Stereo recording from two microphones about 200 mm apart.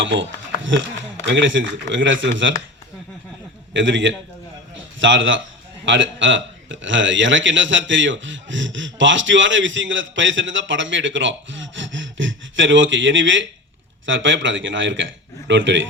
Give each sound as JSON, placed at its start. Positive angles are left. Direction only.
{"t": 0.0, "sound": "a man's voice", "side_deg": -65}
{"t": 3.8, "sound": "a man's voice", "side_deg": -70}